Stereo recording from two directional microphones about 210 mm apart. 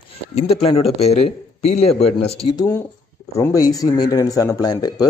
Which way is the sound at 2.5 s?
15° left (ahead or behind).